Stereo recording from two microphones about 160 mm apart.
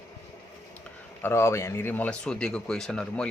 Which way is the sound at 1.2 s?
15° left (ahead or behind).